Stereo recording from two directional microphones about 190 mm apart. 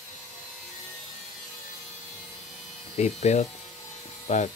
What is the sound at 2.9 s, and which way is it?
Speech, 35° left (ahead or behind).